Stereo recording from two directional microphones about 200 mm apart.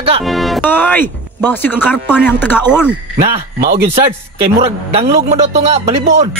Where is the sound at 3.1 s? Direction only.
30° right (ahead or behind).